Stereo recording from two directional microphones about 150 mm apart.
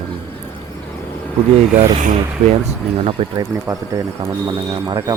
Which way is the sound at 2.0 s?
50° right (ahead or behind).